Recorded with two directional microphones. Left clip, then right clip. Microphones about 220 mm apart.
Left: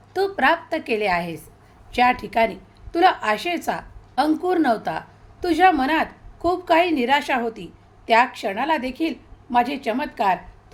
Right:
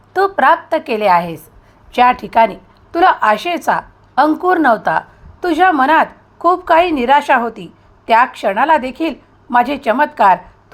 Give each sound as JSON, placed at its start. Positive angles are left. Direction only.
{"t": 0.1, "sound": "a woman's voice", "side_deg": -5}
{"t": 3.7, "sound": "a sound", "side_deg": -10}
{"t": 4.4, "sound": "a woman's voice", "side_deg": -10}